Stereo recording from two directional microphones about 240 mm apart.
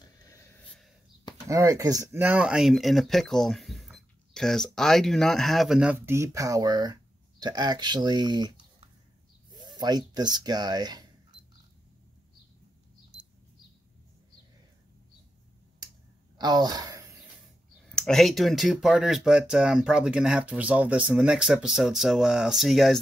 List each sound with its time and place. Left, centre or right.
0.0 s a sound: centre
1.5 s speech: centre
16.3 s speech: centre
17.8 s speech: centre